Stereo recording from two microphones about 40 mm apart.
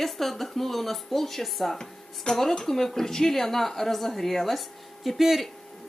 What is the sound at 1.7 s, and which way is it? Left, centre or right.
A woman's voice, centre.